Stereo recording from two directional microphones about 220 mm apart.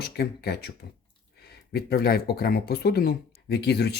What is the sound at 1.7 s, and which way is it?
Speech, 45° left (ahead or behind).